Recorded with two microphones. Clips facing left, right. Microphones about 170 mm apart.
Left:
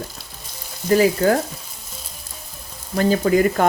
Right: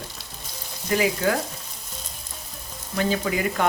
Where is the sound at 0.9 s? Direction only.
40° left (ahead or behind).